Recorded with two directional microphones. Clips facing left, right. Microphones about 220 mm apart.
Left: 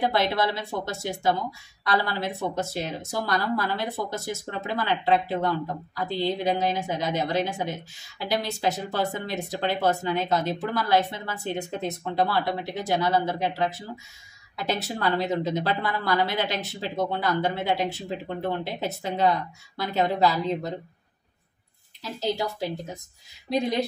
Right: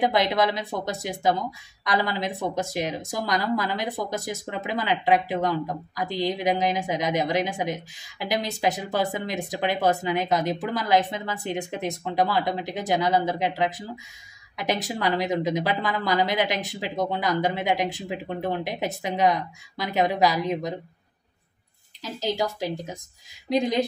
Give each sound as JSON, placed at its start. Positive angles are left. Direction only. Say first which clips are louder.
{"t": 0.0, "sound": "speech", "louder": "right 2 dB", "side_deg": -15}
{"t": 22.2, "sound": "a woman's voice", "louder": "right 1 dB", "side_deg": -90}
{"t": 23.5, "sound": "speech", "louder": "right 2 dB", "side_deg": -20}